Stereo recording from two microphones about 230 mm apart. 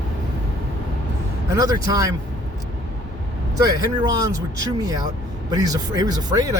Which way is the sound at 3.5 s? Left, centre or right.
Centre.